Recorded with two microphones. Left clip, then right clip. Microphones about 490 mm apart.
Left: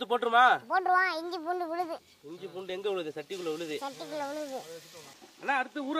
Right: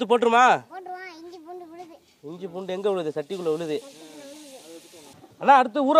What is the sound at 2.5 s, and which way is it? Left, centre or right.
Speech, right.